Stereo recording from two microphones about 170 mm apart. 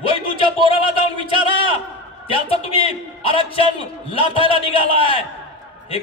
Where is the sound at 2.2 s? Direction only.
35° left (ahead or behind).